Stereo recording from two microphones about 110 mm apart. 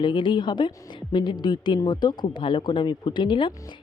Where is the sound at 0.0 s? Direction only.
45° left (ahead or behind).